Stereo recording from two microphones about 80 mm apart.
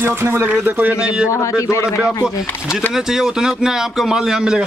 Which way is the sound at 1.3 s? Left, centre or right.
Left.